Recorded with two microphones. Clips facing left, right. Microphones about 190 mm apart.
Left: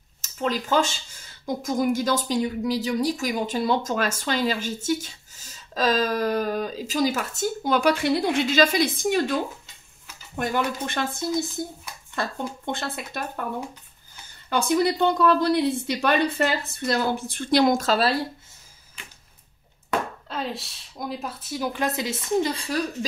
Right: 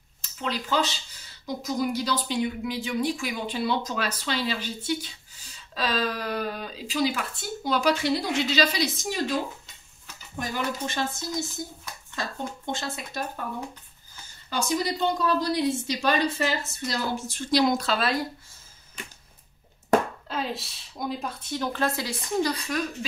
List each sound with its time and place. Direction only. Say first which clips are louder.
0.2 s speech: left 5 dB; 45° left (ahead or behind)
10.3 s speech: left 5 dB; 60° left (ahead or behind)
12.7 s speech: left 2 dB; 55° left (ahead or behind)
14.5 s speech: left 5 dB; 55° left (ahead or behind); by 18.2 s 35° left (ahead or behind)
19.0 s a sound: right 5 dB; 45° right (ahead or behind)
20.2 s a woman's voice: even; centre (ahead or behind); by 22.8 s 30° left (ahead or behind)